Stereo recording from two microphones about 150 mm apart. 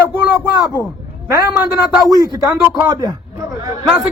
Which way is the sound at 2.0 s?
25° right (ahead or behind).